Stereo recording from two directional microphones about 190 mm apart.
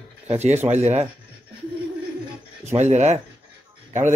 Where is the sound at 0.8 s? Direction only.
35° right (ahead or behind).